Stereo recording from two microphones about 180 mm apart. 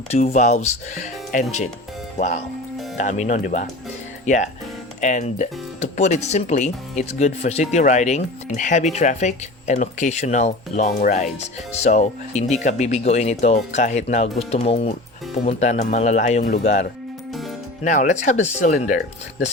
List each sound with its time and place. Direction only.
0.1 s speech: 40° left (ahead or behind)
17.8 s speech: 45° left (ahead or behind)